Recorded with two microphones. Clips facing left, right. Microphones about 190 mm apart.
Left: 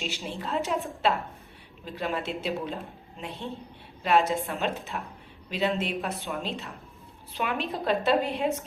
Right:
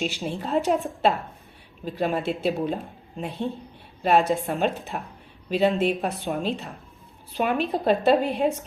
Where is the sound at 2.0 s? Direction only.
45° right (ahead or behind).